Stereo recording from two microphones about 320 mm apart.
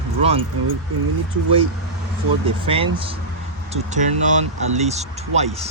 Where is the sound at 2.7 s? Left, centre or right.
Centre.